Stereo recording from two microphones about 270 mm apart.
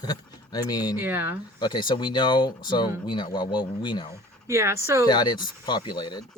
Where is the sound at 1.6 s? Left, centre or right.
Centre.